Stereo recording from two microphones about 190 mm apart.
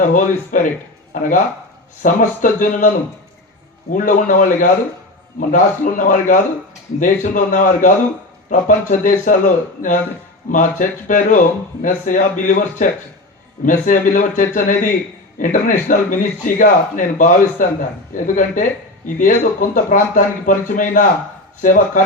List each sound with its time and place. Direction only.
0.0 s speech: 45° left (ahead or behind)
3.9 s speech: 45° left (ahead or behind)
10.5 s speech: 45° left (ahead or behind)